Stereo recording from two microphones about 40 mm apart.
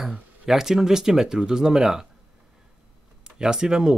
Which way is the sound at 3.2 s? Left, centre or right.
Centre.